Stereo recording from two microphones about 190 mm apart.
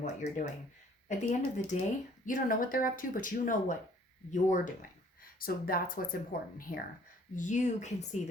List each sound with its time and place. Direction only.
0.0 s speech: 40° left (ahead or behind)
6.7 s speech: 25° left (ahead or behind)
7.3 s speech: 40° left (ahead or behind)